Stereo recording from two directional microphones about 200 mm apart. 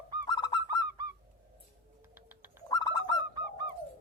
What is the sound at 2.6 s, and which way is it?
Bird, 20° left (ahead or behind).